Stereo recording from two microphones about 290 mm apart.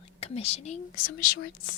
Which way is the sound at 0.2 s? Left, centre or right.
Left.